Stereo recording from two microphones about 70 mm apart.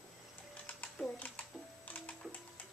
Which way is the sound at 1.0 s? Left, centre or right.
Centre.